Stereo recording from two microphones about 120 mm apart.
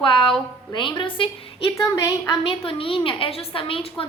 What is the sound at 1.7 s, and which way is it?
Speech, 25° left (ahead or behind).